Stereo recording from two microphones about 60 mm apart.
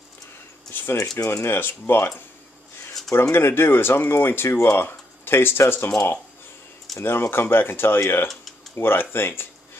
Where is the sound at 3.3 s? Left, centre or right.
Left.